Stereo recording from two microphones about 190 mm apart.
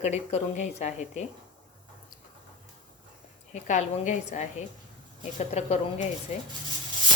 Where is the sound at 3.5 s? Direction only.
40° left (ahead or behind).